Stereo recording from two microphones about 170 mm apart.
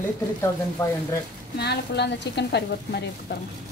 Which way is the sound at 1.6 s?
80° left.